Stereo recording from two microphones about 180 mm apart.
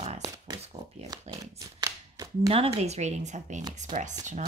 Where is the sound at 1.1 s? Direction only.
20° right (ahead or behind).